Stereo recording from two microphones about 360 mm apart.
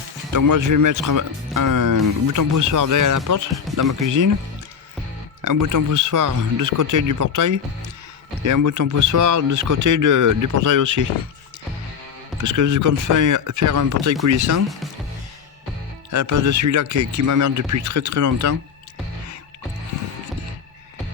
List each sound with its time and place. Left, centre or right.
0.3 s speech: right
5.4 s speech: right
12.4 s speech: right
16.0 s speech: right